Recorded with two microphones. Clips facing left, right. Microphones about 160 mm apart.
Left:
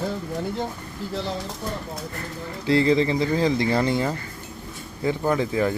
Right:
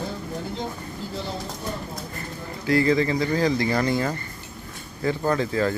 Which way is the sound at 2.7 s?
25° left (ahead or behind).